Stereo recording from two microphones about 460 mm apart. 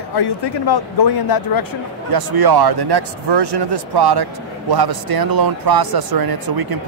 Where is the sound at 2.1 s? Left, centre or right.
Right.